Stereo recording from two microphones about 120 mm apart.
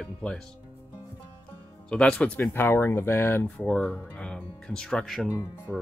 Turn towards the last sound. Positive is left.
turn(degrees=15)  # may be behind; listen again after turning